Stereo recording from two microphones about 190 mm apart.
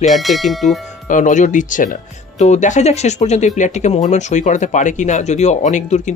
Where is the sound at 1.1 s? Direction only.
40° left (ahead or behind).